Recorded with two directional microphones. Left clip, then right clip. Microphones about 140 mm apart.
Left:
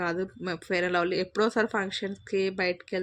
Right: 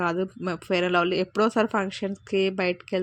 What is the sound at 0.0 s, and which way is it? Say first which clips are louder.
Speech: right 4 dB; 40° right (ahead or behind).